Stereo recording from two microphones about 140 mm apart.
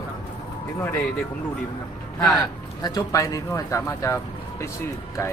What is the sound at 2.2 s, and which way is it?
Speech, 25° left (ahead or behind).